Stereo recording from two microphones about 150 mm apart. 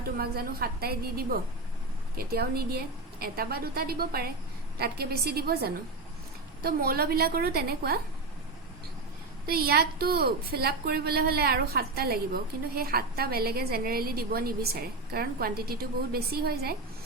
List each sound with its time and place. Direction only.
0.2 s a woman's voice: 90° right
9.5 s a woman's voice: 90° right